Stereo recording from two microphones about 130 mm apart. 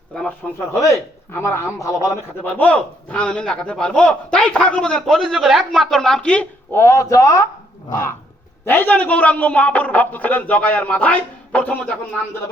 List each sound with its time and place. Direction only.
0.1 s a man's voice: 5° left (ahead or behind)
0.8 s a man's voice: 20° left (ahead or behind)
2.4 s a man's voice: 10° left (ahead or behind)
6.8 s a man's voice: 25° left (ahead or behind)
8.6 s a man's voice: 15° left (ahead or behind)